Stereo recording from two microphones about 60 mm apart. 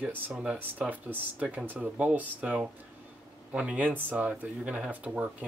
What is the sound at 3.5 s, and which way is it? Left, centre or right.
Speech, right.